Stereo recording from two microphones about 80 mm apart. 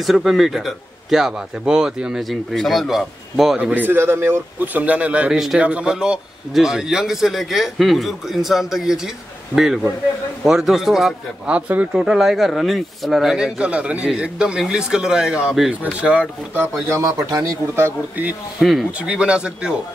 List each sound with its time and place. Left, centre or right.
0.0 s a man's voice: centre
2.2 s a man's voice: centre
3.5 s a man's voice: centre
10.4 s a man's voice: centre
11.4 s speech: centre
16.9 s a man's voice: right
17.7 s a man's voice: right
18.6 s a man's voice: centre
18.9 s speech: centre